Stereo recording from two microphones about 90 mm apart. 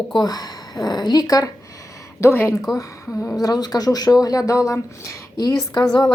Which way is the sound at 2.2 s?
30° left (ahead or behind).